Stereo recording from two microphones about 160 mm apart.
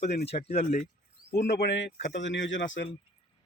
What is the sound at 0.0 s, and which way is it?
Speech, 90° left.